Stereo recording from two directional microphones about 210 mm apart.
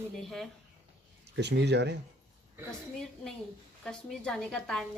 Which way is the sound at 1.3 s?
55° right (ahead or behind).